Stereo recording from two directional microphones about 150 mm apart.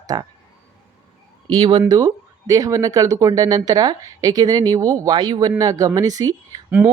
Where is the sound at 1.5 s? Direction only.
30° right (ahead or behind).